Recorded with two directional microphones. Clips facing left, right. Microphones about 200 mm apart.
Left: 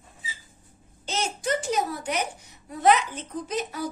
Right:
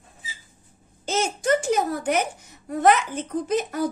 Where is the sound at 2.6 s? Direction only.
50° right (ahead or behind).